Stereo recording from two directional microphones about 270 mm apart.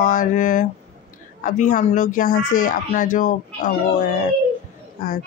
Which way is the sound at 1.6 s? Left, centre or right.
Left.